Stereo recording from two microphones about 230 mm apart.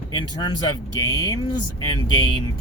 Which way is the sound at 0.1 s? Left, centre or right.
Centre.